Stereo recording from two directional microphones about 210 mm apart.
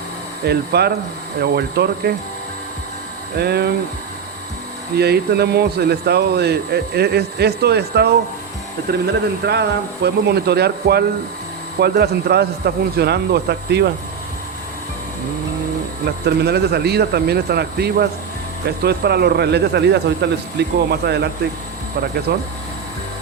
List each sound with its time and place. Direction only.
0.4 s speech: 50° right (ahead or behind)
3.3 s speech: 50° right (ahead or behind)
4.9 s speech: 50° right (ahead or behind)
16.2 s speech: 50° right (ahead or behind)
22.3 s speech: 50° right (ahead or behind)